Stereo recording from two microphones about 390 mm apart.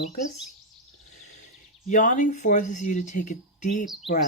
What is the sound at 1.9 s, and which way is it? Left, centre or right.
Speech, centre.